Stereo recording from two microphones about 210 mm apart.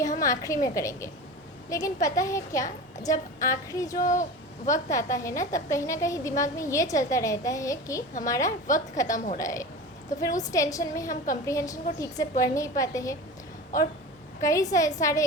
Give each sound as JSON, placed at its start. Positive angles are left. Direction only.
{"t": 0.2, "sound": "a woman's voice", "side_deg": 15}
{"t": 4.0, "sound": "speech", "side_deg": 35}
{"t": 4.6, "sound": "a woman's voice", "side_deg": 15}
{"t": 9.1, "sound": "speech", "side_deg": 40}
{"t": 9.4, "sound": "a woman's voice", "side_deg": 15}
{"t": 14.4, "sound": "a woman's voice", "side_deg": 15}